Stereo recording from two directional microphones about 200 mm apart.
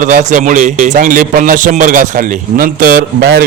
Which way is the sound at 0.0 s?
40° right (ahead or behind).